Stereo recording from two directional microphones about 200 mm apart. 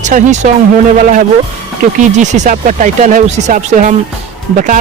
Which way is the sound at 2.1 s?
35° right (ahead or behind).